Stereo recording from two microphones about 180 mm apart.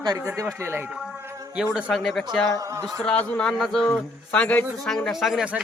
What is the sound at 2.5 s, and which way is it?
Speech, 20° right (ahead or behind).